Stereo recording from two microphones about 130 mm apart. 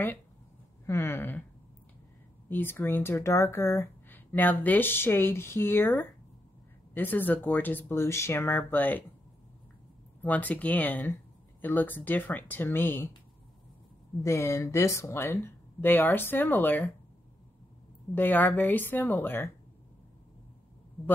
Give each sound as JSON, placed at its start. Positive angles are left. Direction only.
{"t": 0.8, "sound": "speech", "side_deg": 20}
{"t": 2.5, "sound": "speech", "side_deg": 15}
{"t": 10.2, "sound": "speech", "side_deg": 15}
{"t": 14.2, "sound": "speech", "side_deg": 20}
{"t": 18.1, "sound": "speech", "side_deg": 15}